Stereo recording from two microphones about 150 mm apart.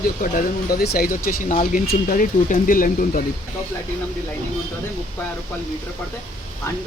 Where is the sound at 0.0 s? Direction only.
70° left (ahead or behind).